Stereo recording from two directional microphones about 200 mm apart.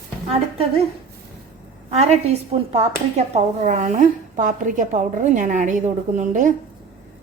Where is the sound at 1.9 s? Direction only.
30° right (ahead or behind).